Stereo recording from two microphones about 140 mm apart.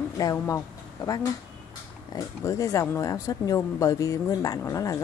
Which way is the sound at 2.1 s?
25° left (ahead or behind).